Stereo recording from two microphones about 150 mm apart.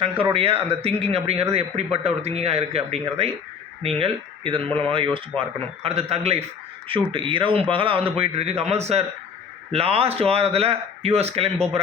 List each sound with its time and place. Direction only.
0.0 s a man's voice: 35° right (ahead or behind)